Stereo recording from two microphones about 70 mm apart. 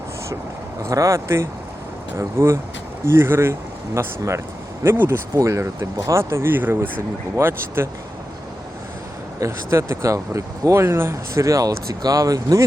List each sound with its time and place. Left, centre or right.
0.9 s speech: right
6.5 s speech: right
9.6 s speech: right